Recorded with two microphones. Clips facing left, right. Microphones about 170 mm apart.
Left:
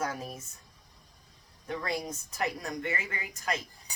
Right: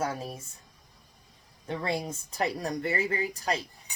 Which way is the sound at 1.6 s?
25° right (ahead or behind).